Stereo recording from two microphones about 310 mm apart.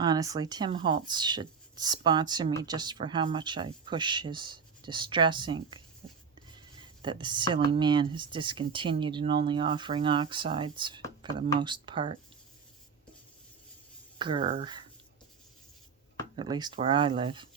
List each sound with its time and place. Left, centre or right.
0.0 s speech: centre
6.0 s writing: centre
6.6 s speech: centre
14.2 s speech: centre
16.3 s speech: centre